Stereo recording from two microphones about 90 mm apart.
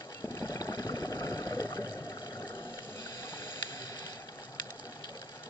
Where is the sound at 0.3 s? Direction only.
35° left (ahead or behind).